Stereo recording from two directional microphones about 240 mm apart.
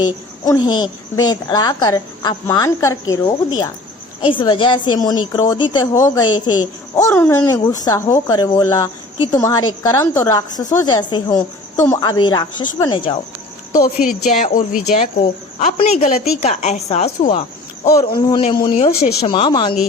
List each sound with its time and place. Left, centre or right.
0.0 s speech: centre
13.8 s a woman's voice: left